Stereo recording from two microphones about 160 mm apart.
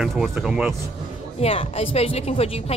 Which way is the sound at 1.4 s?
40° left (ahead or behind).